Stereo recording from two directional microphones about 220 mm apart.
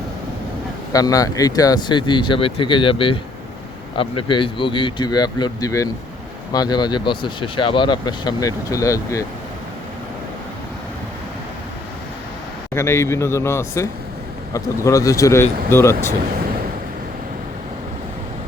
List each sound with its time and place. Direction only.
0.9 s speech: 15° left (ahead or behind)
12.7 s speech: 10° left (ahead or behind)